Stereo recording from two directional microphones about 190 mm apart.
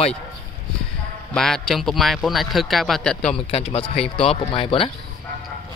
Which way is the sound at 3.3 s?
30° left (ahead or behind).